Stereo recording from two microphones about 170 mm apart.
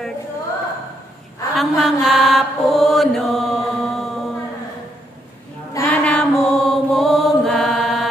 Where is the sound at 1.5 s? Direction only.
Centre (ahead or behind).